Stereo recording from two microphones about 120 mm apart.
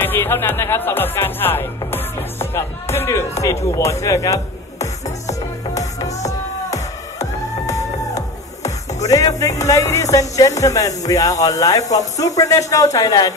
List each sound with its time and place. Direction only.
0.0 s speech: 20° left (ahead or behind)
6.7 s music: 25° left (ahead or behind)
10.1 s speech: 25° left (ahead or behind)